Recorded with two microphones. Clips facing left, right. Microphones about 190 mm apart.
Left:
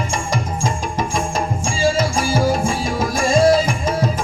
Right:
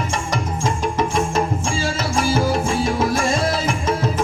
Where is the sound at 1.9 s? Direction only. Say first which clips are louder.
Left 1 dB; 10° left (ahead or behind).